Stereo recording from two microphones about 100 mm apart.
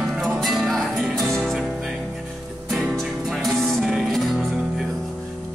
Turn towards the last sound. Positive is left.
turn(degrees=0)  # may be behind; listen again after turning